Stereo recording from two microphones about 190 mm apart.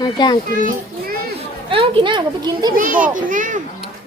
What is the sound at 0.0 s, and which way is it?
Speech, 20° left (ahead or behind).